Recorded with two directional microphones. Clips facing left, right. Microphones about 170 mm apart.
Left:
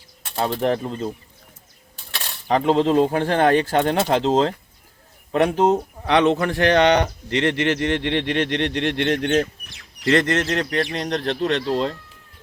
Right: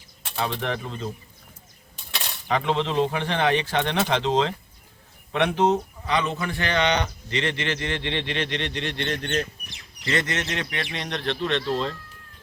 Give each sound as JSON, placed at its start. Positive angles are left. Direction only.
{"t": 0.3, "sound": "speech", "side_deg": 40}
{"t": 2.5, "sound": "speech", "side_deg": 40}
{"t": 6.1, "sound": "speech", "side_deg": 70}
{"t": 10.2, "sound": "speech", "side_deg": 45}